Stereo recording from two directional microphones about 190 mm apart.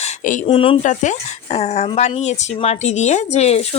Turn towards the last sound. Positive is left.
turn(degrees=35)  # may be behind; listen again after turning